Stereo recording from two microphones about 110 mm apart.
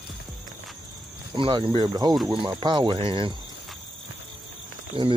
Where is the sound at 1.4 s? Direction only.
50° right (ahead or behind).